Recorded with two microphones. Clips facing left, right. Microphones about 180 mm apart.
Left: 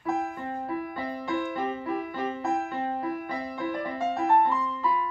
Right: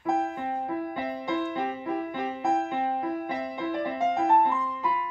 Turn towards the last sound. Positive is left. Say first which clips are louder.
# left 2 dB
turn(degrees=-15)  # may be behind; listen again after turning